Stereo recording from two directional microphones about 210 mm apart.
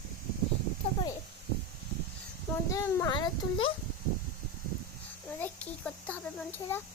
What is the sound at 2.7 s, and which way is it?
A child's voice, 15° left (ahead or behind).